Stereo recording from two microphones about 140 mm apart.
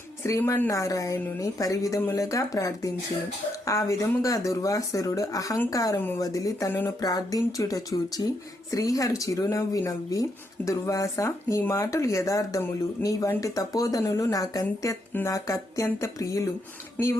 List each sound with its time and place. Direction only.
0.2 s a woman's voice: 20° left (ahead or behind)
17.0 s speech: 10° left (ahead or behind)